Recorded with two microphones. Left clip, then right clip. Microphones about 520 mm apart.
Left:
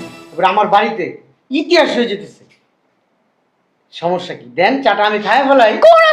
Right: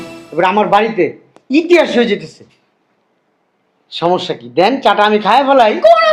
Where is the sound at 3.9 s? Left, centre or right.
Right.